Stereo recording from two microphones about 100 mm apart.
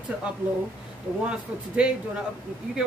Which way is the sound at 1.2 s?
10° right (ahead or behind).